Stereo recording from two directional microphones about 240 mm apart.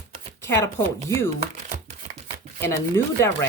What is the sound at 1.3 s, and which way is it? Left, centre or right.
Crumpling, right.